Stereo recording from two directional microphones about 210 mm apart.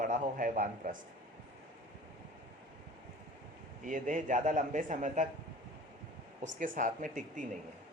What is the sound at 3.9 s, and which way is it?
A man's voice, 35° right (ahead or behind).